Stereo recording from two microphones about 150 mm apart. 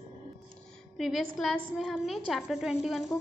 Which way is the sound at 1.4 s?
Centre (ahead or behind).